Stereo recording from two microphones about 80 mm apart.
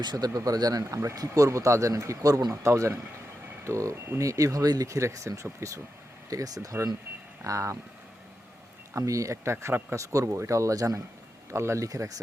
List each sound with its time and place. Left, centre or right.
0.0 s speech: right
8.9 s speech: right